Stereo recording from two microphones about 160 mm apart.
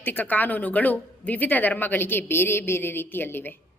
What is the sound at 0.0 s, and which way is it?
A woman's voice, 10° left (ahead or behind).